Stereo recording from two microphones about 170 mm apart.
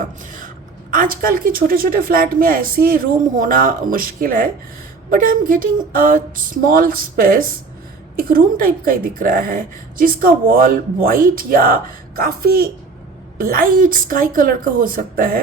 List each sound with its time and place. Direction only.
0.0 s speech: 50° right (ahead or behind)